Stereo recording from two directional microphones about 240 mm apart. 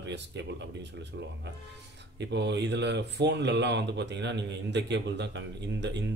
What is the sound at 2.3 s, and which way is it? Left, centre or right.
Speech, right.